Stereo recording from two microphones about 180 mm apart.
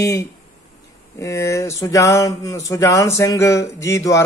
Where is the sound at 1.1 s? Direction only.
15° left (ahead or behind).